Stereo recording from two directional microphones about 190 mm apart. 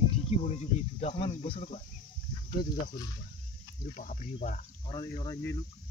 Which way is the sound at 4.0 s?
45° left (ahead or behind).